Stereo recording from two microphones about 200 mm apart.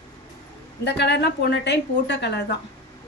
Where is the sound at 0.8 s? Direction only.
60° left (ahead or behind).